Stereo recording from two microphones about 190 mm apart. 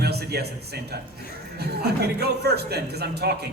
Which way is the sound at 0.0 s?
60° right (ahead or behind).